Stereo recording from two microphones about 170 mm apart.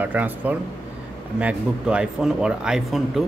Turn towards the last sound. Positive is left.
turn(degrees=0)  # may be behind; listen again after turning